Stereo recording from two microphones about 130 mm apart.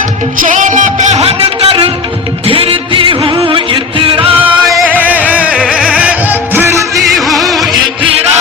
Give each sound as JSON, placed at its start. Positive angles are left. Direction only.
{"t": 0.4, "sound": "music", "side_deg": -80}
{"t": 4.9, "sound": "music", "side_deg": -10}
{"t": 7.1, "sound": "music", "side_deg": 0}